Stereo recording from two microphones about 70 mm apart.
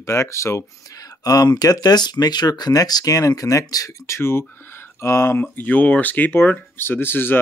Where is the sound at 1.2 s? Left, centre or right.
Left.